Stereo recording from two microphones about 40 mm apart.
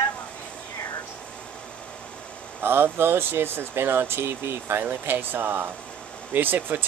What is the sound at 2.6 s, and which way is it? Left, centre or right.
Speech, right.